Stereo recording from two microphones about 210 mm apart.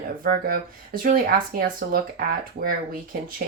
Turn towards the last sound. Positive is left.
turn(degrees=-45)  # may be behind; listen again after turning